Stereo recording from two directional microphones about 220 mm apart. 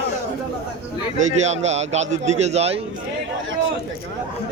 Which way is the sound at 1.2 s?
30° right (ahead or behind).